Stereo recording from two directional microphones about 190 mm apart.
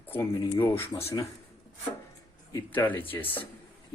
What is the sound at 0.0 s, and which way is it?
Speech, 10° left (ahead or behind).